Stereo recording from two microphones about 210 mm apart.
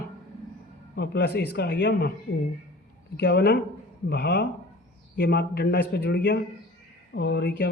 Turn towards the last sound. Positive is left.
turn(degrees=50)  # may be behind; listen again after turning